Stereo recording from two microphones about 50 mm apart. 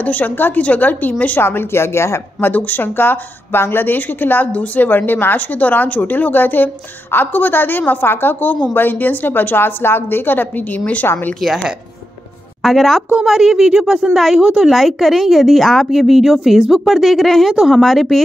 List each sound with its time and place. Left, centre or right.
0.0 s speech: left
1.4 s a woman's voice: left
2.4 s a woman's voice: left
12.6 s a woman's voice: centre